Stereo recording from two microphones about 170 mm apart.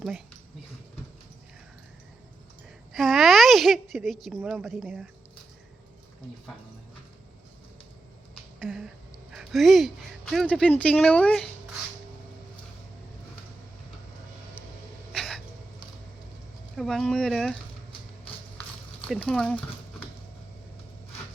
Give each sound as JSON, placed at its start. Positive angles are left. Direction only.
{"t": 2.9, "sound": "a woman's voice", "side_deg": 0}
{"t": 8.5, "sound": "a sound", "side_deg": 0}
{"t": 10.3, "sound": "speech", "side_deg": 5}
{"t": 15.1, "sound": "a sound", "side_deg": 0}
{"t": 16.7, "sound": "a woman's voice", "side_deg": 0}
{"t": 19.0, "sound": "speech", "side_deg": 5}